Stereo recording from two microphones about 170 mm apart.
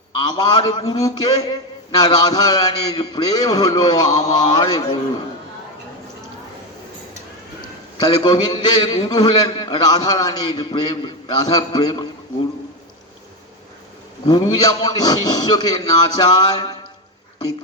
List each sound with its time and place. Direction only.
0.2 s a man's voice: 25° left (ahead or behind)
8.0 s a man's voice: 25° left (ahead or behind)
14.3 s a man's voice: 25° left (ahead or behind)